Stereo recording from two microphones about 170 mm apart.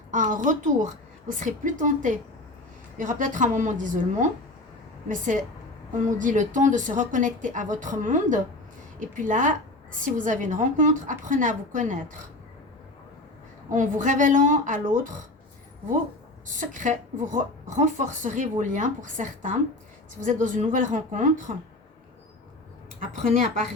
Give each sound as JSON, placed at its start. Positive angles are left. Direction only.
{"t": 0.1, "sound": "a woman's voice", "side_deg": -45}
{"t": 13.7, "sound": "a woman's voice", "side_deg": -50}
{"t": 16.5, "sound": "a woman's voice", "side_deg": -50}